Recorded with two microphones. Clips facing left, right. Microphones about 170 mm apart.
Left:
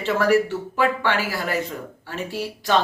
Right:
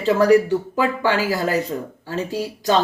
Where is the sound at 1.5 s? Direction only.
40° right (ahead or behind).